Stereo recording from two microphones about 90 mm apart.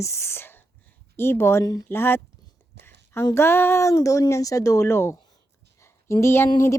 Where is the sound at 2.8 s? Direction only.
30° left (ahead or behind).